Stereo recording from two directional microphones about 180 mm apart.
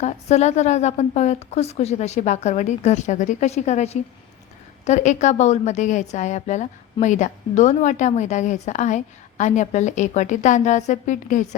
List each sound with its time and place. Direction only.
0.0 s a woman's voice: 40° left (ahead or behind)